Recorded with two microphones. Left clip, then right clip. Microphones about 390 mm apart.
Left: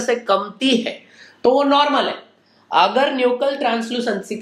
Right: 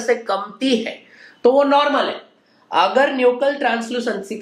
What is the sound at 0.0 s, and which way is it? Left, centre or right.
Speech, centre.